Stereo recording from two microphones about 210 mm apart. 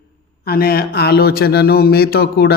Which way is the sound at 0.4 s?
45° left (ahead or behind).